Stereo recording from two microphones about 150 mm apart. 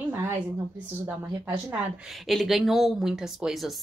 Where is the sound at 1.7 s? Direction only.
5° right (ahead or behind).